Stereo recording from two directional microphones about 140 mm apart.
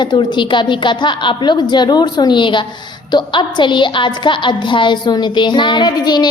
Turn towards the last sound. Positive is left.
turn(degrees=30)  # may be behind; listen again after turning